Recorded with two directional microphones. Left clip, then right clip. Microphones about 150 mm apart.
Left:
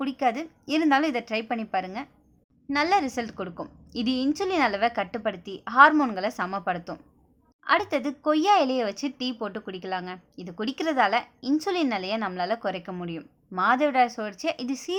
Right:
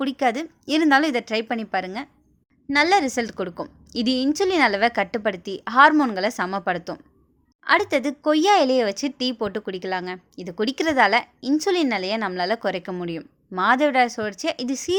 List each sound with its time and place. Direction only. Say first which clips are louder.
0.0 s a woman's voice: right 4 dB; 25° right (ahead or behind)